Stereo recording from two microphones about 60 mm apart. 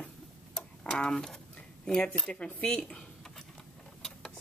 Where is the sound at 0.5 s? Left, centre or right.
Centre.